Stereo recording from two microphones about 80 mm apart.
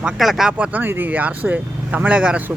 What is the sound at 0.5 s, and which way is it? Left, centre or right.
Speech, right.